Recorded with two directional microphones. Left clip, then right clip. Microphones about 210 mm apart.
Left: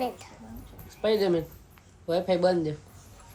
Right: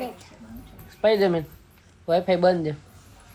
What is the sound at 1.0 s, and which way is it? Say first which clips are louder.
Speech: right 5 dB; 35° right (ahead or behind).